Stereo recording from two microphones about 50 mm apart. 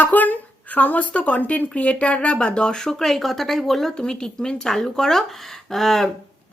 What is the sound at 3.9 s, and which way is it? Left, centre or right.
Speech, centre.